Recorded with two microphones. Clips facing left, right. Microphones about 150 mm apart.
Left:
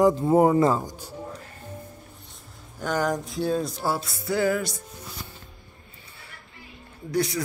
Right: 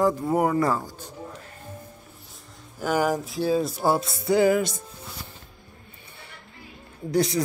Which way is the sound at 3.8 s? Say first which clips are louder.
Right 5 dB; 20° right (ahead or behind).